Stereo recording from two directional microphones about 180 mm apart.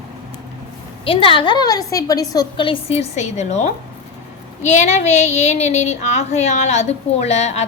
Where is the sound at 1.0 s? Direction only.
30° left (ahead or behind).